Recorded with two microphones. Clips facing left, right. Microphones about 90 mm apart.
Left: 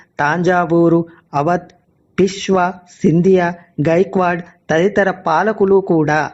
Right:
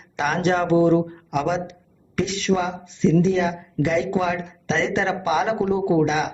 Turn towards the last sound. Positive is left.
turn(degrees=50)  # may be behind; listen again after turning